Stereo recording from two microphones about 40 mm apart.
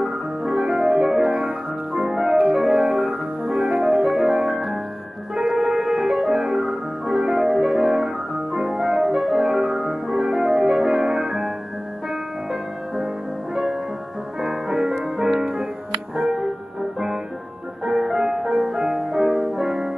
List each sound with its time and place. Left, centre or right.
0.0 s music: centre
14.4 s music: centre
17.8 s music: centre